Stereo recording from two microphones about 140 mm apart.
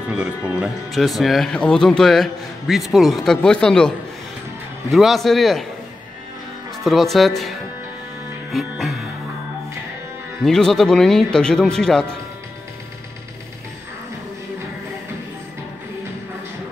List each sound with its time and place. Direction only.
0.1 s speech: 5° right (ahead or behind)
4.9 s speech: centre (ahead or behind)
6.8 s speech: centre (ahead or behind)
8.5 s music: centre (ahead or behind)
10.4 s speech: 5° left (ahead or behind)